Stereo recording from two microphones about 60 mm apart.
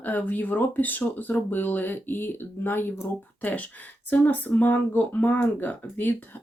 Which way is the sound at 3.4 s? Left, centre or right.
Left.